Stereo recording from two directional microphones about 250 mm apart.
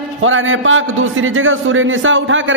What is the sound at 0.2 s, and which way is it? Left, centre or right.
A man's voice, right.